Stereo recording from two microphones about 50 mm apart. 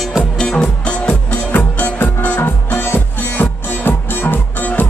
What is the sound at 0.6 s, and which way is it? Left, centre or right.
Music, left.